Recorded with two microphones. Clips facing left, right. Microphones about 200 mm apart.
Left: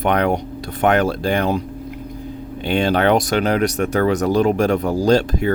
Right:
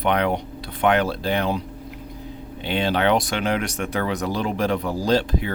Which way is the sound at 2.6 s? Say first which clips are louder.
Left 4 dB; 50° left (ahead or behind).